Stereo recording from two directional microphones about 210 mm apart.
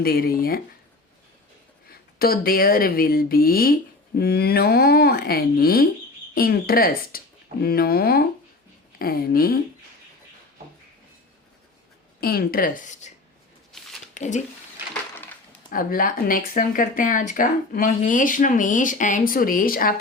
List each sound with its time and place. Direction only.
0.0 s speech: 45° left (ahead or behind)
1.9 s speech: 45° left (ahead or behind)
12.2 s speech: 45° left (ahead or behind)
13.7 s a sound: centre (ahead or behind)
14.1 s speech: 35° left (ahead or behind)
15.7 s speech: 40° left (ahead or behind)